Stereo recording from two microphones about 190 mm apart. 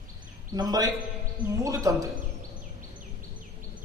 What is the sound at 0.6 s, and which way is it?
A man's voice, 20° right (ahead or behind).